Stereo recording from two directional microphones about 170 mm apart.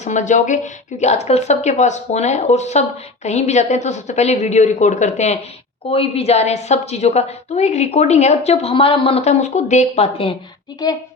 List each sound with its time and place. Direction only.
0.0 s a woman's voice: 45° left (ahead or behind)